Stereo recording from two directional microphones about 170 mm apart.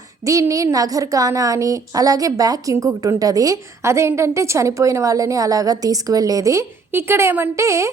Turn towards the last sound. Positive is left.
turn(degrees=-15)  # may be behind; listen again after turning